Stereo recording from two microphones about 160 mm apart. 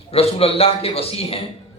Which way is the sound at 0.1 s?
35° left (ahead or behind).